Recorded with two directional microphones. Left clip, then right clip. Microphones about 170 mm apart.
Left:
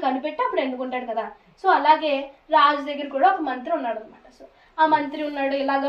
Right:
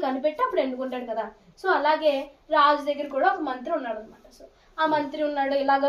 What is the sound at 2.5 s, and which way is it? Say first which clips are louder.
A woman's voice: left 2 dB; 80° right.